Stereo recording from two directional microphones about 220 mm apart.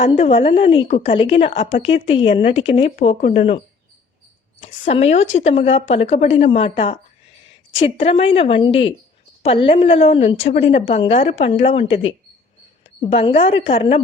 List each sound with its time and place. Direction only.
0.0 s a woman's voice: 25° left (ahead or behind)
4.6 s a woman's voice: 30° left (ahead or behind)
7.9 s a woman's voice: 25° left (ahead or behind)